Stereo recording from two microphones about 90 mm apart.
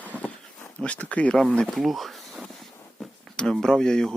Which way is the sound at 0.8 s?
15° left (ahead or behind).